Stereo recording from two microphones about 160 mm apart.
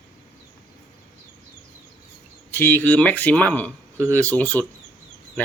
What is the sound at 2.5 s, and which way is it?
Speech, 10° left (ahead or behind).